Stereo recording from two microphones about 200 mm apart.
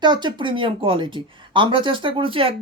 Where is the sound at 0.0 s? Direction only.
20° right (ahead or behind).